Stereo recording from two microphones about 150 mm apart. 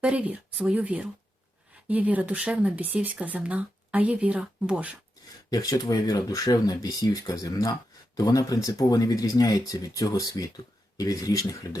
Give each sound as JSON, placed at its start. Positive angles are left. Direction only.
{"t": 0.0, "sound": "speech", "side_deg": -10}
{"t": 5.5, "sound": "speech", "side_deg": 25}